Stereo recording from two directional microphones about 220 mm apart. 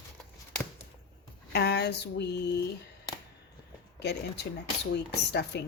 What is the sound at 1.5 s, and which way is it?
Speech, 50° left (ahead or behind).